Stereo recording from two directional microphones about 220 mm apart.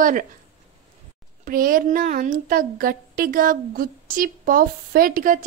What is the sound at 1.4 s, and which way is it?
A woman's voice, 40° right (ahead or behind).